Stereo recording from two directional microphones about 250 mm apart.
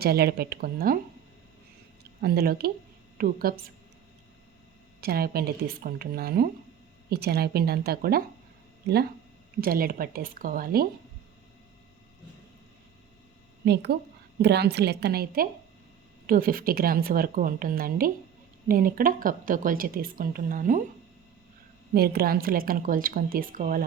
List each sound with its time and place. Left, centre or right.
0.0 s a woman's voice: right
2.2 s a woman's voice: right
4.9 s a woman's voice: right
9.6 s a woman's voice: right
14.4 s a woman's voice: right
21.9 s a woman's voice: right